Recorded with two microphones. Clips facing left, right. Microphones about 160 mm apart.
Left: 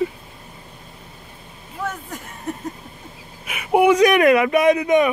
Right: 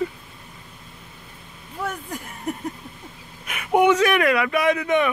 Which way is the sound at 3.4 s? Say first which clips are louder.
Left 2 dB; 5° left (ahead or behind).